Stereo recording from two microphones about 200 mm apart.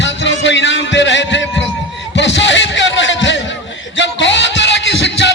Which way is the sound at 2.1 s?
65° left (ahead or behind).